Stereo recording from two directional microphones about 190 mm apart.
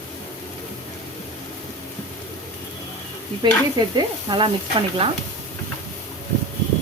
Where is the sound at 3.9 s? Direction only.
25° right (ahead or behind).